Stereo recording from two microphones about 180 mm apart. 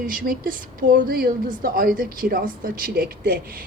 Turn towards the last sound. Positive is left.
turn(degrees=-55)  # may be behind; listen again after turning